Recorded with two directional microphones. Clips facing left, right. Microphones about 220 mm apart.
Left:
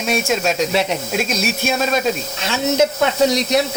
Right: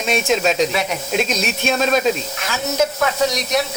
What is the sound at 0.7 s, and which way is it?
Speech, 30° left (ahead or behind).